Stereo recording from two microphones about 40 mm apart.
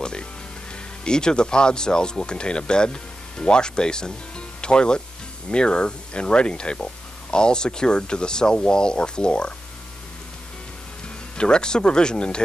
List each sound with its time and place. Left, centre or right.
0.0 s music: left
1.0 s speech: left
11.3 s speech: left